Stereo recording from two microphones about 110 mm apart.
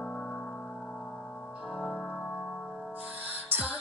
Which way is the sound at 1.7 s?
10° left (ahead or behind).